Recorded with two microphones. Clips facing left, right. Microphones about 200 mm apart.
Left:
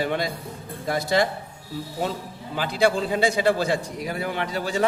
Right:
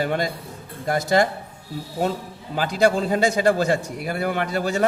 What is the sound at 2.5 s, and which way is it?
A man's voice, 45° right (ahead or behind).